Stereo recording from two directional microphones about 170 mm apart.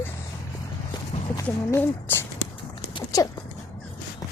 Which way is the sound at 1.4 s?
15° left (ahead or behind).